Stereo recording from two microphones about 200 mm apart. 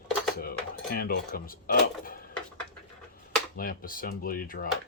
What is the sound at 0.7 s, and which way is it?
Cutlery, 50° left (ahead or behind).